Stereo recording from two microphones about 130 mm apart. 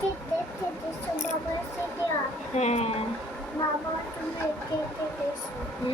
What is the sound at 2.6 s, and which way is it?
Speech, 60° left (ahead or behind).